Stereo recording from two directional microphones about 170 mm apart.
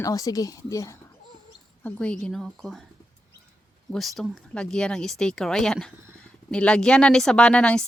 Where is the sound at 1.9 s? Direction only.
5° left (ahead or behind).